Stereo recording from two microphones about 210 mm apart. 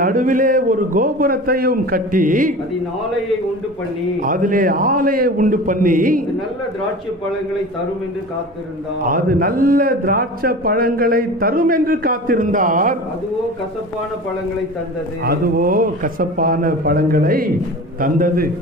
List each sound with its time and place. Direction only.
0.0 s a man's voice: 40° right (ahead or behind)
4.2 s a man's voice: 40° right (ahead or behind)
9.0 s a man's voice: 40° right (ahead or behind)
15.2 s a man's voice: 45° right (ahead or behind)